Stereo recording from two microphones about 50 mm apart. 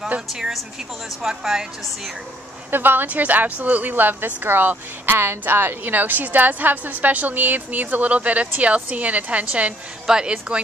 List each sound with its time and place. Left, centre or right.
0.3 s a woman's voice: centre
2.7 s a woman's voice: right